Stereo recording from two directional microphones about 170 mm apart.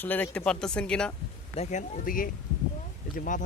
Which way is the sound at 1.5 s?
50° left (ahead or behind).